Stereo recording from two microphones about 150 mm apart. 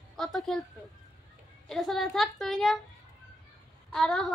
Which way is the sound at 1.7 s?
Centre (ahead or behind).